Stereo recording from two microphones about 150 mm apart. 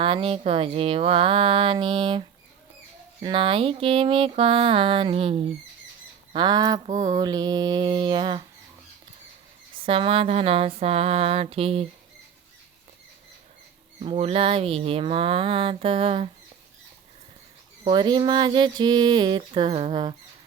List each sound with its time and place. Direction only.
0.0 s speech: 40° right (ahead or behind)
6.3 s mantra: 30° right (ahead or behind)
9.8 s speech: 40° right (ahead or behind)
14.0 s speech: 40° right (ahead or behind)
17.8 s speech: 30° right (ahead or behind)